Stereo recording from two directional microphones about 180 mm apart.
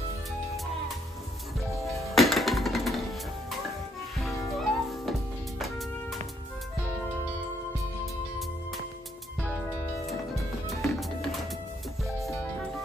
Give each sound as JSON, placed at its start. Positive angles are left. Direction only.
{"t": 1.9, "sound": "music", "side_deg": 0}
{"t": 4.2, "sound": "music", "side_deg": 0}
{"t": 10.8, "sound": "music", "side_deg": 0}